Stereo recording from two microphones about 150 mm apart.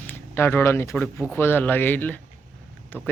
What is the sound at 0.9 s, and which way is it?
Speech, centre (ahead or behind).